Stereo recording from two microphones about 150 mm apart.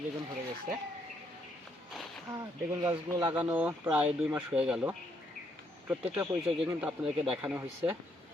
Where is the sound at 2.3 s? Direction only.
20° right (ahead or behind).